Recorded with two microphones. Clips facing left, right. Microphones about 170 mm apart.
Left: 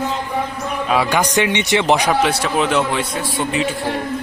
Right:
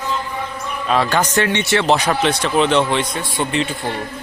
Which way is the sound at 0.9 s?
10° left (ahead or behind).